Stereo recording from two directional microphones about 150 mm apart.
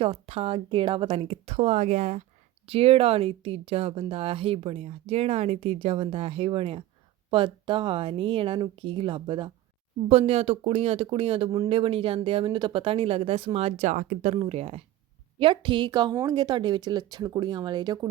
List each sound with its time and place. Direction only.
0.0 s speech: 40° right (ahead or behind)
14.3 s speech: 35° right (ahead or behind)